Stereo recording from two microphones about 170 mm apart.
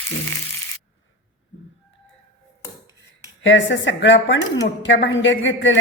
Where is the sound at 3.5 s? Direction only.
90° left.